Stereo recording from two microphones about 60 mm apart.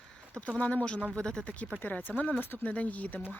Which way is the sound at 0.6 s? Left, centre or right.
Left.